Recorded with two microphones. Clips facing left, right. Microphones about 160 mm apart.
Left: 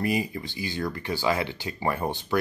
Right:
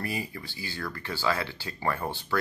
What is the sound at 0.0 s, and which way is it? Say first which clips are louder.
Speech: left 7 dB; 15° left (ahead or behind).